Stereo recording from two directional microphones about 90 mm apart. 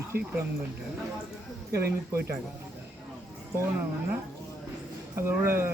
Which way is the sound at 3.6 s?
25° right (ahead or behind).